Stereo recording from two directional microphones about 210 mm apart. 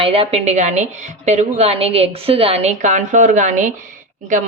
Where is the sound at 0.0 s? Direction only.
25° right (ahead or behind).